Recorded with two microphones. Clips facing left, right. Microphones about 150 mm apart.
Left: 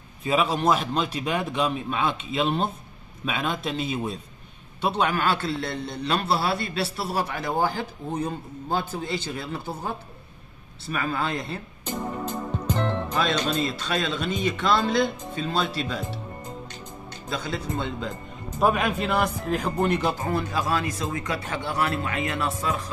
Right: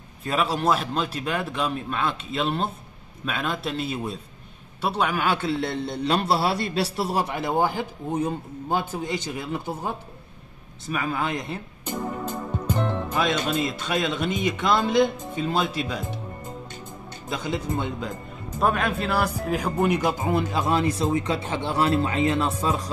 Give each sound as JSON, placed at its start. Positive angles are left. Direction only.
{"t": 0.2, "sound": "a man's voice", "side_deg": 5}
{"t": 12.7, "sound": "music", "side_deg": -10}
{"t": 13.6, "sound": "speech", "side_deg": -15}
{"t": 17.3, "sound": "speech", "side_deg": -20}
{"t": 18.6, "sound": "a man's voice", "side_deg": 0}